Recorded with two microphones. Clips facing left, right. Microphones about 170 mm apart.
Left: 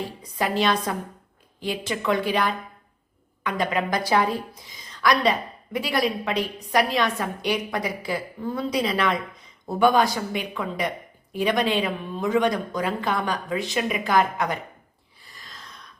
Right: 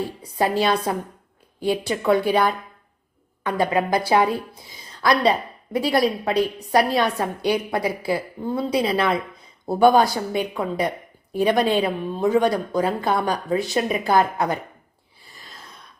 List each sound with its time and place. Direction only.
0.3 s a woman's voice: 30° right (ahead or behind)